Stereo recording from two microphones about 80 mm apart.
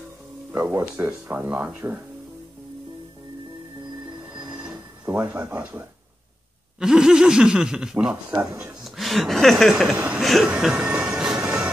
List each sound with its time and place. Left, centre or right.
0.5 s speech: right
4.6 s a sound: right
6.8 s speech: centre
8.8 s speech: centre
9.9 s speech: centre
10.2 s speech: centre
10.5 s music: centre